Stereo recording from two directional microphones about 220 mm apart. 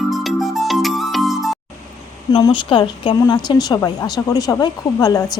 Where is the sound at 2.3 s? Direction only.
20° left (ahead or behind).